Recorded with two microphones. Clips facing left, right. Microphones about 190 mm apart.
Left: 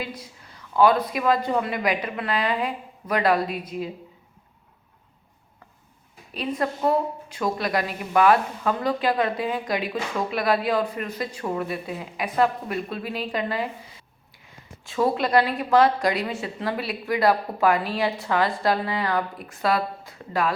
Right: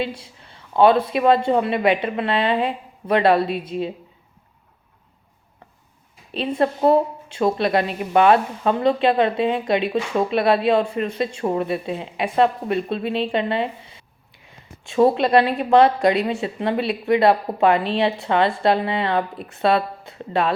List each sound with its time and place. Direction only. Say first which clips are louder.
0.0 s a woman's voice: right 7 dB; 30° right (ahead or behind)
6.3 s a woman's voice: right 5 dB; 25° right (ahead or behind)
14.8 s a woman's voice: right 6 dB; 25° right (ahead or behind)